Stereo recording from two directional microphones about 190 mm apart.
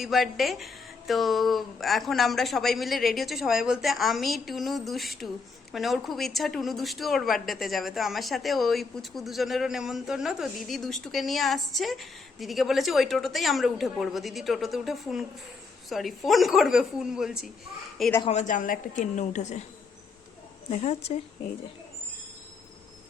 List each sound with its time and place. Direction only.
0.0 s speech: centre (ahead or behind)
18.3 s a woman's voice: 40° left (ahead or behind)
20.7 s a woman's voice: 35° left (ahead or behind)